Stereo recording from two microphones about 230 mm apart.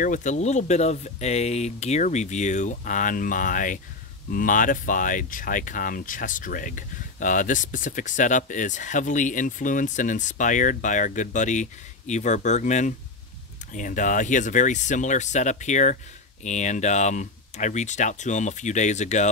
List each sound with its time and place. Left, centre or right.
0.0 s speech: left